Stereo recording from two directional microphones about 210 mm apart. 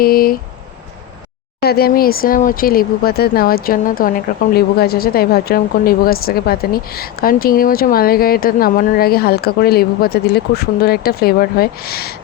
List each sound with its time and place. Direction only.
0.0 s speech: 45° left (ahead or behind)
1.6 s speech: 45° left (ahead or behind)